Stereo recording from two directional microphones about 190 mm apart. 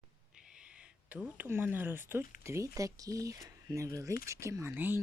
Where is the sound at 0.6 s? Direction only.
5° right (ahead or behind).